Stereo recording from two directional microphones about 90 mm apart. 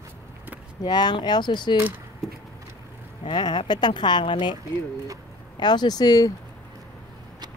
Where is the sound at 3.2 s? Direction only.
60° left (ahead or behind).